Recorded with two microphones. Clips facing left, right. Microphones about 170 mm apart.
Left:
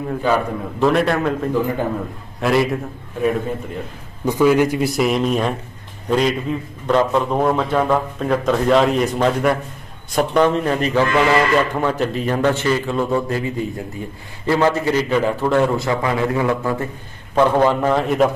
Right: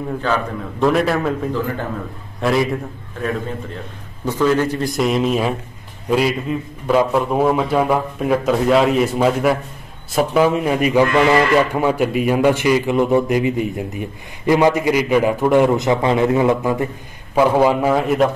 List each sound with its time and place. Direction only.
0.2 s a man's voice: 10° left (ahead or behind)
0.8 s a man's voice: centre (ahead or behind)